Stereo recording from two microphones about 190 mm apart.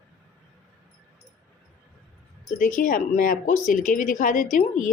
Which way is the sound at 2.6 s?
45° left (ahead or behind).